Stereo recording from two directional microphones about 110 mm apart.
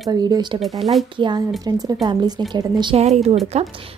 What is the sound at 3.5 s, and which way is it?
Speech, 70° right (ahead or behind).